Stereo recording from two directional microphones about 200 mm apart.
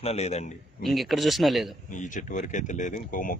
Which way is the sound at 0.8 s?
Centre (ahead or behind).